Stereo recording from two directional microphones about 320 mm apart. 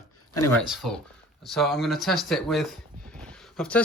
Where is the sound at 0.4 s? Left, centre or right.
Centre.